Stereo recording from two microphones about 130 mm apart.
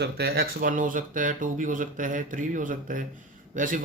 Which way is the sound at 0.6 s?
90° right.